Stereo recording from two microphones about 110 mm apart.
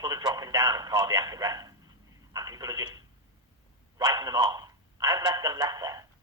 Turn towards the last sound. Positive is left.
turn(degrees=-35)  # may be behind; listen again after turning